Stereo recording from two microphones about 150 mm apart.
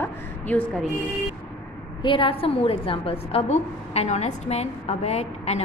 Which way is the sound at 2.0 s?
35° left (ahead or behind).